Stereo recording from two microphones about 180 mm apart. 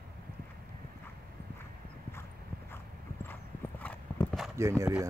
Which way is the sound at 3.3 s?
10° left (ahead or behind).